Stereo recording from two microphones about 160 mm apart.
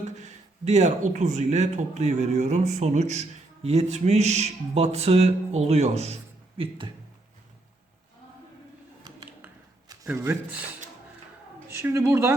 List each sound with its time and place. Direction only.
0.0 s speech: 50° right (ahead or behind)
6.6 s speech: 30° right (ahead or behind)
9.1 s a sound: 25° right (ahead or behind)
10.1 s a woman's voice: 15° right (ahead or behind)
11.7 s a woman's voice: 15° right (ahead or behind)